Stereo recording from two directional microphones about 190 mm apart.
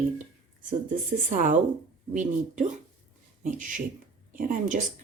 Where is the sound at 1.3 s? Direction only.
40° right (ahead or behind).